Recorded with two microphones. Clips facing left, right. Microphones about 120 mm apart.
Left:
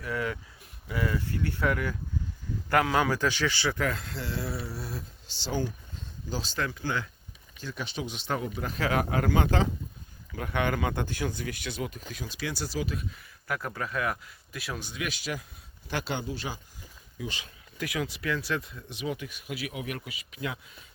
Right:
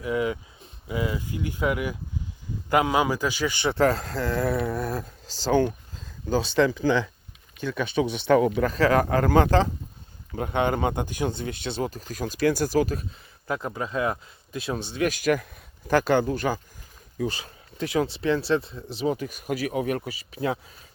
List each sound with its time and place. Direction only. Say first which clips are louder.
0.0 s a man's voice: right 6 dB; 20° right (ahead or behind)
3.8 s speech: right 9 dB; 35° right (ahead or behind); by 7.0 s 75° right (ahead or behind)
8.3 s speech: right 13 dB; 90° right
8.6 s speech: right 8 dB; 40° right (ahead or behind)
10.3 s speech: right 5 dB; 25° right (ahead or behind)
12.2 s speech: right 12 dB; 50° right (ahead or behind)
13.5 s speech: right 4 dB; 20° right (ahead or behind)
15.0 s speech: right 13 dB; 50° right (ahead or behind)
17.2 s speech: right 9 dB; 40° right (ahead or behind)
17.7 s speech: right 7 dB; 30° right (ahead or behind)